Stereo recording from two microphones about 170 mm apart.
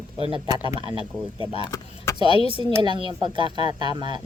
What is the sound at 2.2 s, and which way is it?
Speech, 35° left (ahead or behind).